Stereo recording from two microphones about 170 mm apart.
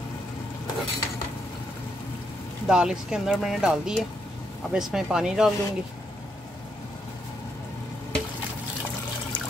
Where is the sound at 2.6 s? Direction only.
5° right (ahead or behind).